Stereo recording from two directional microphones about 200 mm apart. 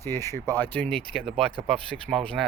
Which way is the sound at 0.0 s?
15° left (ahead or behind).